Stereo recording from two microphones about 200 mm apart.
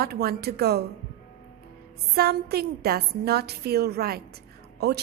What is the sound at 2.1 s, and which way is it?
A woman's voice, 50° right (ahead or behind).